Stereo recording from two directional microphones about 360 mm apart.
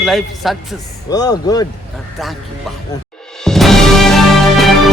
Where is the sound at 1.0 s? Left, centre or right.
Centre.